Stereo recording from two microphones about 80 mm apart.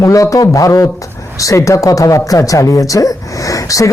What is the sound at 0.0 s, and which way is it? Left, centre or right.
Speech, left.